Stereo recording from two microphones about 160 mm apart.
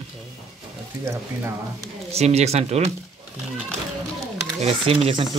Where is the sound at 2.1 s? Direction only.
40° right (ahead or behind).